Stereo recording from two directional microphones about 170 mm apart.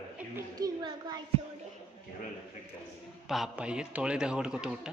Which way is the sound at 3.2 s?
Centre (ahead or behind).